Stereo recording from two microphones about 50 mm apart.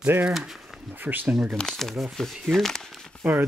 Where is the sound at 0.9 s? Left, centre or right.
Right.